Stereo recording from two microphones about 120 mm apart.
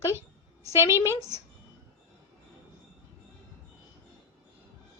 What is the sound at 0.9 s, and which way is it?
Speech, 20° right (ahead or behind).